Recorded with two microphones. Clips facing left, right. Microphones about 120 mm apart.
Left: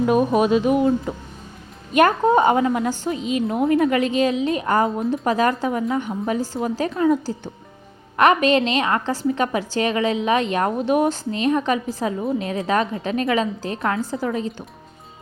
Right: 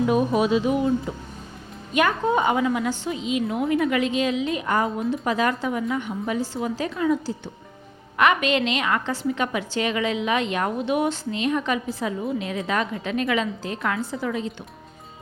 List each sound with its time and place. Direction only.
0.0 s a woman's voice: 50° left (ahead or behind)